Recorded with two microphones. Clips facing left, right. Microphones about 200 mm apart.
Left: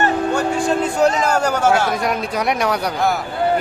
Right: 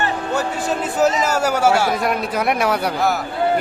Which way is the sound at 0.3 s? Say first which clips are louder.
Left 3 dB; 5° right (ahead or behind).